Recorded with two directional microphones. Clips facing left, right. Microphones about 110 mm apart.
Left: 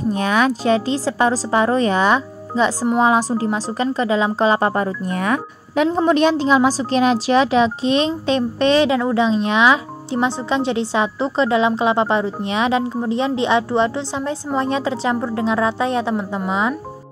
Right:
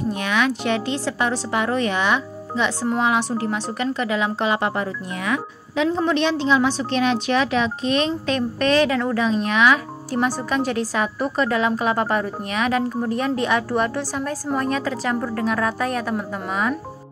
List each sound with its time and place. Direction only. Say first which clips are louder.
0.1 s a woman's voice: left 5 dB; 35° left (ahead or behind)